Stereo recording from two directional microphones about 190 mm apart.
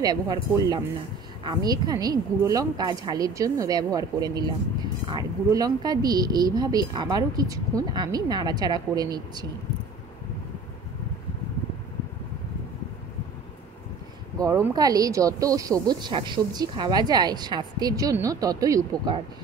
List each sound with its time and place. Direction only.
0.0 s speech: 20° right (ahead or behind)
14.4 s speech: 15° right (ahead or behind)